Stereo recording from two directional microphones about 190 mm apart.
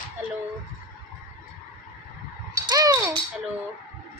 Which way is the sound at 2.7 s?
20° right (ahead or behind).